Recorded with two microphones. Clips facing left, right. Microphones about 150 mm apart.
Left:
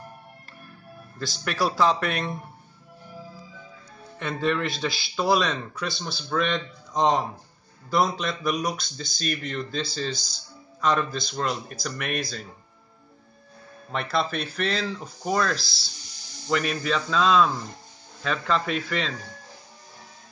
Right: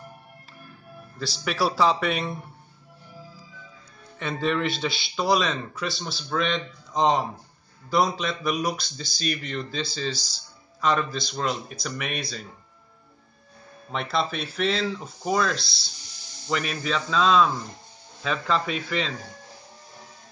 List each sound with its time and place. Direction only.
1.1 s speech: centre (ahead or behind)
4.2 s speech: centre (ahead or behind)
13.8 s speech: centre (ahead or behind)